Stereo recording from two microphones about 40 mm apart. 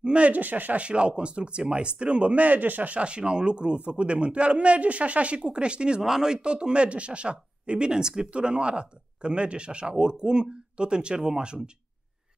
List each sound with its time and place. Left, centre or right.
0.0 s a sound: right
0.3 s speech: right
3.0 s speech: right
6.0 s speech: centre